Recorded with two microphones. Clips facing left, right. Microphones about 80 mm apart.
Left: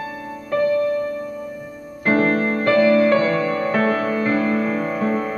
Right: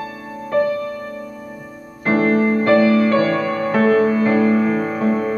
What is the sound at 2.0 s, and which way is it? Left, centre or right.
Music, centre.